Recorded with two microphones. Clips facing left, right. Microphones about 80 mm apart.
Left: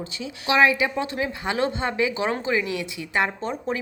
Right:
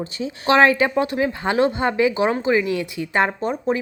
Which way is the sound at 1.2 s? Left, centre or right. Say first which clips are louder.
Right 5 dB; right.